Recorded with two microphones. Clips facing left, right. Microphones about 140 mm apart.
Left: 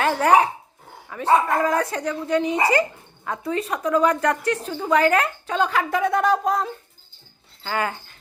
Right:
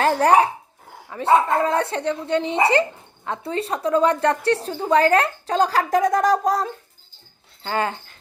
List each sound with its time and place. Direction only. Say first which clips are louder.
0.0 s a woman's voice: right 1 dB; 35° right (ahead or behind)
7.6 s speech: right 2 dB; 30° right (ahead or behind)